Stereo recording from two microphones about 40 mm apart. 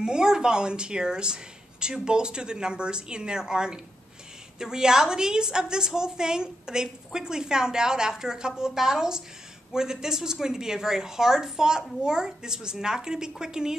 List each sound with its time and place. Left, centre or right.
0.0 s a woman's voice: centre